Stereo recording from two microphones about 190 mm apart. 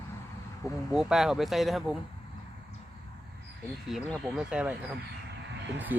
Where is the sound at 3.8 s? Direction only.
Centre (ahead or behind).